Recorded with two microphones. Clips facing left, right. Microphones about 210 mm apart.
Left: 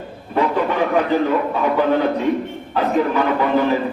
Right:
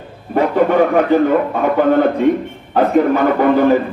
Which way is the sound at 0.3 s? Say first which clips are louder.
Right 6 dB; 50° right (ahead or behind).